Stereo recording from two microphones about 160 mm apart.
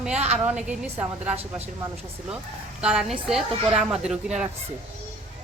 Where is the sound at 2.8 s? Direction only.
5° right (ahead or behind).